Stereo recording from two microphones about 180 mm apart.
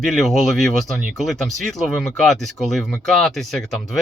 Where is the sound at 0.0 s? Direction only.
Centre (ahead or behind).